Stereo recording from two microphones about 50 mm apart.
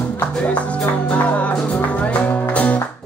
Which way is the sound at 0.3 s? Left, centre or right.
Left.